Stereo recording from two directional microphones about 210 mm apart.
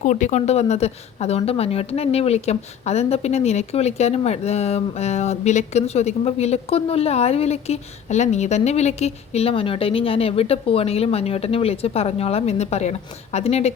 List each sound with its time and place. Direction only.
0.0 s speech: 35° left (ahead or behind)